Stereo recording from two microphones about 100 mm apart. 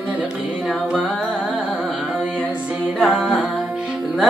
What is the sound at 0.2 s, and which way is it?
Music, 5° right (ahead or behind).